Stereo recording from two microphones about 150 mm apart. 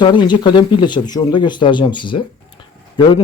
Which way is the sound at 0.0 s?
30° left (ahead or behind).